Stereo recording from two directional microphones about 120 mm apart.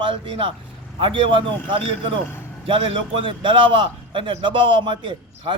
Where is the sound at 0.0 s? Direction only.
45° right (ahead or behind).